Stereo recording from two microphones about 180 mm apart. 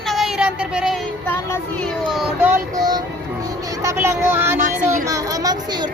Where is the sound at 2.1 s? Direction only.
5° right (ahead or behind).